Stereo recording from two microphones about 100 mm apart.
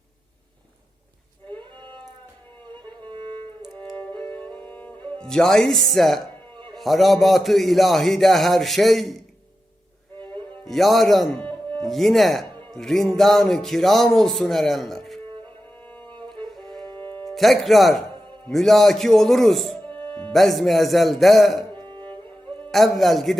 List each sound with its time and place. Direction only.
1.5 s a sound: 55° right (ahead or behind)
3.1 s music: 55° right (ahead or behind)
4.0 s music: 15° left (ahead or behind)
6.7 s speech: centre (ahead or behind)
10.2 s music: 50° right (ahead or behind)
10.7 s speech: centre (ahead or behind)
15.9 s music: 15° left (ahead or behind)
16.8 s music: 55° right (ahead or behind)
17.3 s speech: centre (ahead or behind)
19.9 s music: 15° left (ahead or behind)
20.3 s speech: centre (ahead or behind)
21.8 s music: 50° right (ahead or behind)
22.6 s a man's voice: centre (ahead or behind)